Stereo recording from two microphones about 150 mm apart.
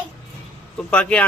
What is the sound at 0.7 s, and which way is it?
Speech, 5° left (ahead or behind).